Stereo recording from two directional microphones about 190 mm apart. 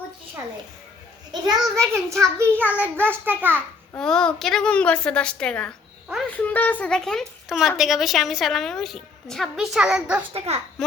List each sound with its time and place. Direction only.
1.5 s a child's voice: 15° right (ahead or behind)
3.9 s a woman's voice: 5° left (ahead or behind)
10.3 s a child's voice: 30° right (ahead or behind)